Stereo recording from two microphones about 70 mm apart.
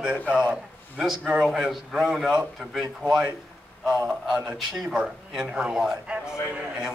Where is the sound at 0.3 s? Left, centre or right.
Centre.